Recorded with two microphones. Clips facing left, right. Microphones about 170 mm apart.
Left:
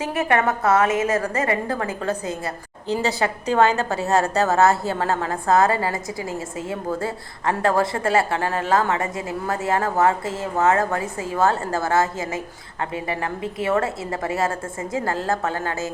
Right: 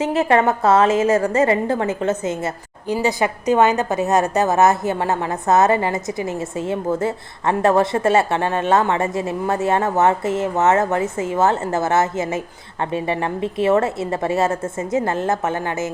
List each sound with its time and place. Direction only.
0.0 s a woman's voice: 25° right (ahead or behind)